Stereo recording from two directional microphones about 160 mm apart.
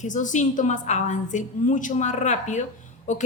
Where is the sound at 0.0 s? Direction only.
50° left (ahead or behind).